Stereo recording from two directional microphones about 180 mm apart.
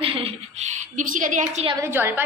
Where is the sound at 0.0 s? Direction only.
30° right (ahead or behind).